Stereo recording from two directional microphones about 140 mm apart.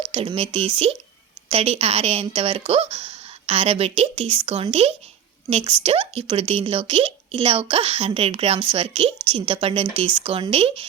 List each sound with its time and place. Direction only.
0.1 s a woman's voice: 40° right (ahead or behind)